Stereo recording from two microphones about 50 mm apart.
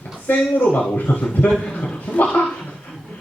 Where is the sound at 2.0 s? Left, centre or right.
Left.